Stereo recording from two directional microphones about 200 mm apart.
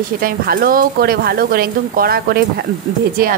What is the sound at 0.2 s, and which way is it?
A woman's voice, 45° right (ahead or behind).